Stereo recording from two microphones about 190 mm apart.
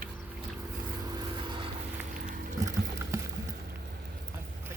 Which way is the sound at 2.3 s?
45° right (ahead or behind).